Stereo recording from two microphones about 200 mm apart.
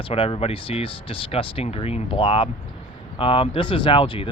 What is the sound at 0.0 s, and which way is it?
Speech, 25° left (ahead or behind).